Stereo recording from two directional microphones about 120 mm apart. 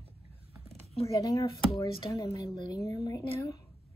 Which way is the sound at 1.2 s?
25° left (ahead or behind).